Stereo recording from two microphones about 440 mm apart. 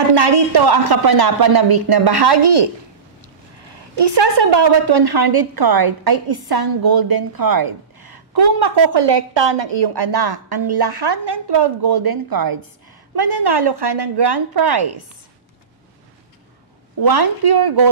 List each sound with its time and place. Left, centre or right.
0.1 s a woman's voice: right
4.0 s a woman's voice: right
17.0 s a woman's voice: right